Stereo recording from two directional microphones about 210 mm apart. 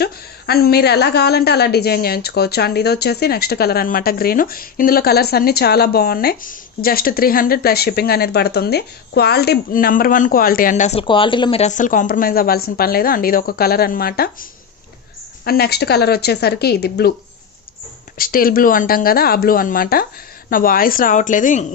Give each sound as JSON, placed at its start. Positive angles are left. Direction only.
{"t": 0.0, "sound": "a woman's voice", "side_deg": 50}
{"t": 15.4, "sound": "a woman's voice", "side_deg": 50}
{"t": 18.2, "sound": "a woman's voice", "side_deg": 45}